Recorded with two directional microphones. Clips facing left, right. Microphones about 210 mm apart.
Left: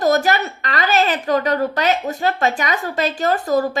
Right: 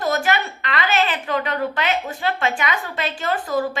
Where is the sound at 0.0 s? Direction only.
40° left (ahead or behind).